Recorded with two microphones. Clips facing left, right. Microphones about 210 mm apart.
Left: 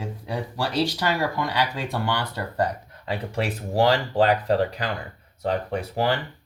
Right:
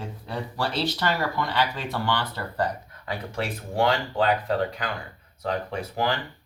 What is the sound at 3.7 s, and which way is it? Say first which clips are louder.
Speech: left 4 dB; 35° left (ahead or behind).